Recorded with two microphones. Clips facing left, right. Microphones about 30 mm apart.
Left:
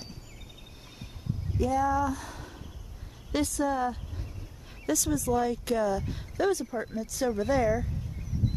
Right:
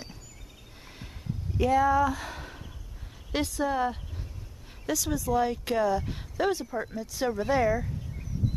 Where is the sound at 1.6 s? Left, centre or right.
Right.